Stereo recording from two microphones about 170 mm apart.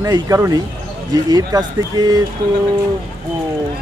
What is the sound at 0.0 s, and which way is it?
Speech, 20° right (ahead or behind).